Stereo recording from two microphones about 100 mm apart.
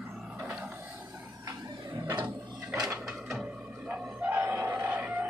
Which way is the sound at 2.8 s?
30° right (ahead or behind).